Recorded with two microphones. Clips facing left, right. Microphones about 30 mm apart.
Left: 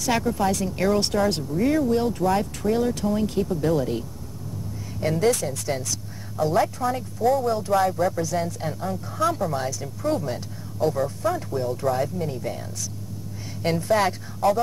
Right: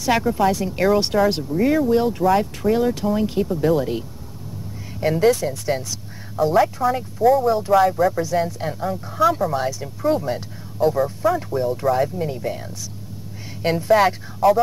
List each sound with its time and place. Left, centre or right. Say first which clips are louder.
0.0 s speech: right 4 dB; centre
5.0 s speech: right 4 dB; centre
13.7 s speech: right 5 dB; centre